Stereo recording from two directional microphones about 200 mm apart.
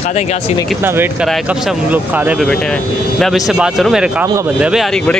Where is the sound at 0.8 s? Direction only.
10° right (ahead or behind).